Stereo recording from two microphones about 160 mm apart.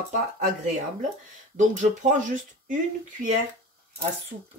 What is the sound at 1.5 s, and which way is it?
Speech, 50° right (ahead or behind).